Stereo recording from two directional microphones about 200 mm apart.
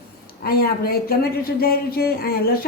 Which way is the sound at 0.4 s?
50° left (ahead or behind).